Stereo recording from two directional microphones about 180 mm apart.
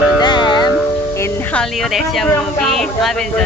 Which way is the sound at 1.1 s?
15° left (ahead or behind).